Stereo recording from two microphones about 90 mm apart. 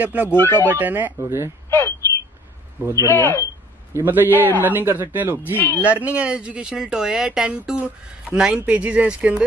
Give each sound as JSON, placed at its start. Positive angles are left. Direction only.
{"t": 0.0, "sound": "a man's voice", "side_deg": -20}
{"t": 0.4, "sound": "speech", "side_deg": 25}
{"t": 0.7, "sound": "a man's voice", "side_deg": -20}
{"t": 1.7, "sound": "a sound", "side_deg": 25}
{"t": 2.9, "sound": "speech", "side_deg": 25}
{"t": 3.9, "sound": "a man's voice", "side_deg": -20}